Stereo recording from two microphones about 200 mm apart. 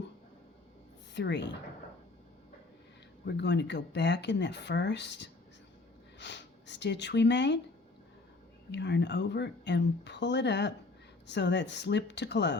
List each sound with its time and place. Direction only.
1.1 s speech: 60° left (ahead or behind)
3.2 s speech: 60° left (ahead or behind)
8.7 s speech: 60° left (ahead or behind)